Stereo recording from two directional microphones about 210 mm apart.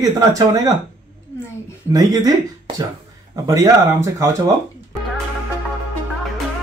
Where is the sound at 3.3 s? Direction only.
15° right (ahead or behind).